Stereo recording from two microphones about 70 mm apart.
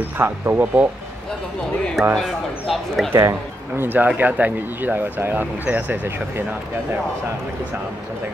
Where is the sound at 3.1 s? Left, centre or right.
Right.